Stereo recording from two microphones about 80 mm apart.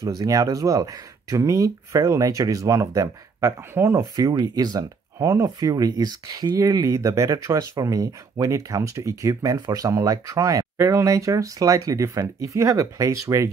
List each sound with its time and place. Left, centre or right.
0.0 s speech: right
4.0 s speech: right